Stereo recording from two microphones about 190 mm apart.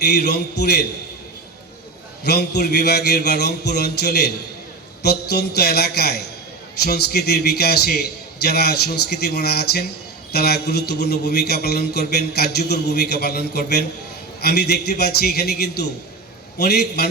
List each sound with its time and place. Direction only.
0.1 s a man's voice: 60° left (ahead or behind)
2.2 s a man's voice: 60° left (ahead or behind)